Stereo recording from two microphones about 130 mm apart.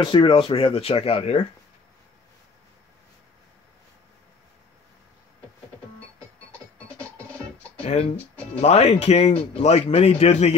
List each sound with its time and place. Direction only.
0.0 s speech: 40° left (ahead or behind)
7.8 s speech: 55° left (ahead or behind)